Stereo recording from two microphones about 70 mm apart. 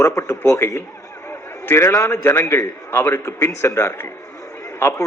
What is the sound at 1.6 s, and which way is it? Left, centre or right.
A man's voice, left.